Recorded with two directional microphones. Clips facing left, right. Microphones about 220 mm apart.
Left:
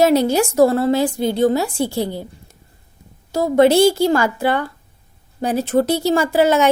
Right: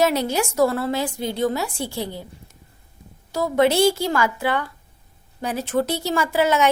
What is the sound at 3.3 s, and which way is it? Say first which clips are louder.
A woman's voice: left 6 dB; 30° left (ahead or behind).